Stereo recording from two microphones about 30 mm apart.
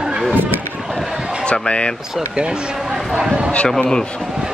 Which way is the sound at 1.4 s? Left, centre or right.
Left.